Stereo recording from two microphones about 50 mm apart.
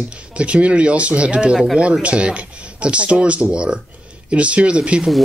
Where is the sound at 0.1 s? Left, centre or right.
Right.